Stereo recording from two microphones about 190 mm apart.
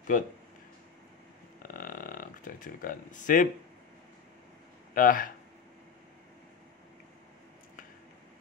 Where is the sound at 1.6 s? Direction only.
45° left (ahead or behind).